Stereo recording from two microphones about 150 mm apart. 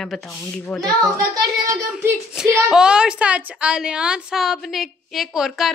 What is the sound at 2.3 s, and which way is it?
A woman's voice, 5° right (ahead or behind).